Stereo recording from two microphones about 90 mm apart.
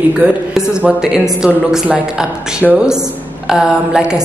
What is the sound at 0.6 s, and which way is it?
A woman's voice, 10° right (ahead or behind).